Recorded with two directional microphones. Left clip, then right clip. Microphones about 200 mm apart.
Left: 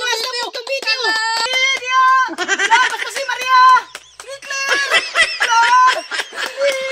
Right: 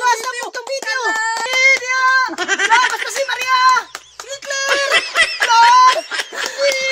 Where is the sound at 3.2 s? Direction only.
35° right (ahead or behind).